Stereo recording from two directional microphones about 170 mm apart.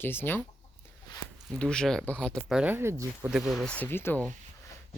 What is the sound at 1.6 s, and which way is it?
Speech, 5° left (ahead or behind).